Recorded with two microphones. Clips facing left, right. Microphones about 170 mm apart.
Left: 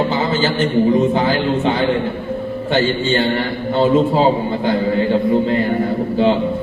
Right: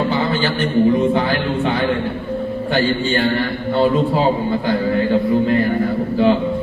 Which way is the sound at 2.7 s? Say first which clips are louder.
Left 2 dB; 25° left (ahead or behind).